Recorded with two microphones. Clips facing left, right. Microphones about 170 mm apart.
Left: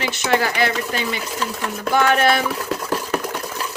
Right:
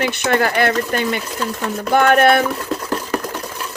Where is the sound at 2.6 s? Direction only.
Centre (ahead or behind).